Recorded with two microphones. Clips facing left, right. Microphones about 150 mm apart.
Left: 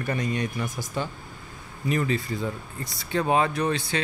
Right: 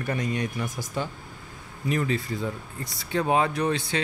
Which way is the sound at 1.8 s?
Centre (ahead or behind).